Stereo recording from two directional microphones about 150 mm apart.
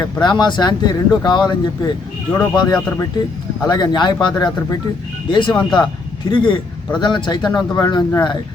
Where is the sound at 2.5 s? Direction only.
25° left (ahead or behind).